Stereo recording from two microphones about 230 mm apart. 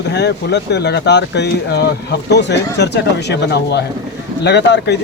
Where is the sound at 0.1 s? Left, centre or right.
Left.